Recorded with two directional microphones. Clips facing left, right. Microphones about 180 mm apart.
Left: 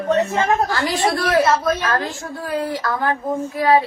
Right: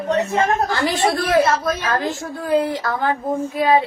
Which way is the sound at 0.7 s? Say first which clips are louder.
Right 1 dB; 20° right (ahead or behind).